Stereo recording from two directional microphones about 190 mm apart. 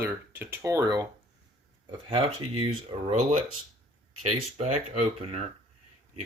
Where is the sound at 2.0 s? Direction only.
25° right (ahead or behind).